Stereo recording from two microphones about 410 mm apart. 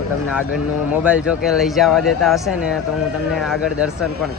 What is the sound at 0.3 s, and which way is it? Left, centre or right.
A man's voice, centre.